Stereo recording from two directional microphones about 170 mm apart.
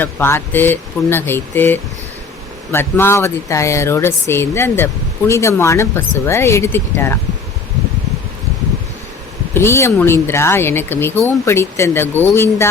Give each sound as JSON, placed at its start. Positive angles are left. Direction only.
{"t": 0.0, "sound": "speech", "side_deg": 15}
{"t": 9.6, "sound": "speech", "side_deg": 15}